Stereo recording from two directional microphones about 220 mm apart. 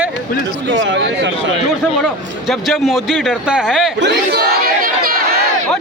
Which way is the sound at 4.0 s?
50° right (ahead or behind).